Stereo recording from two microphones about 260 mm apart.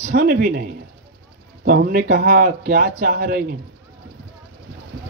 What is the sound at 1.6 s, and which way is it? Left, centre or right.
A man's voice, right.